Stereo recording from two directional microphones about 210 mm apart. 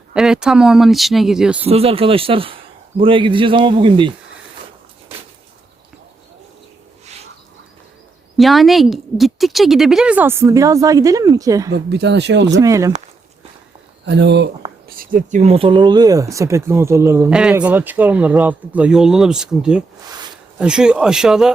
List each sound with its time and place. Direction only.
0.1 s speech: 5° right (ahead or behind)
1.7 s speech: 25° right (ahead or behind)
7.0 s bird: 30° right (ahead or behind)
8.4 s speech: centre (ahead or behind); by 11.7 s 15° right (ahead or behind)
11.7 s speech: 55° right (ahead or behind)
12.5 s speech: 15° right (ahead or behind)
14.0 s speech: 55° right (ahead or behind)
14.8 s speech: 40° right (ahead or behind); by 21.5 s centre (ahead or behind)